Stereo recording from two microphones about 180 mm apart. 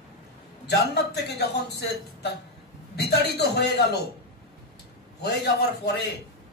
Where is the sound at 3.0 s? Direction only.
65° left (ahead or behind).